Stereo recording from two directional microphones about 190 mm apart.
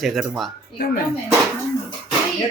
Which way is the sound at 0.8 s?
50° left (ahead or behind).